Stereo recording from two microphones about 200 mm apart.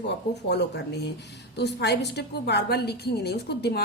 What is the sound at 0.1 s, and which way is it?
A woman's voice, 60° left (ahead or behind).